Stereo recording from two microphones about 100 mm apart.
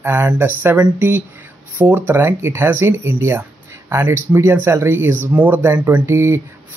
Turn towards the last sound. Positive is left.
turn(degrees=-25)  # may be behind; listen again after turning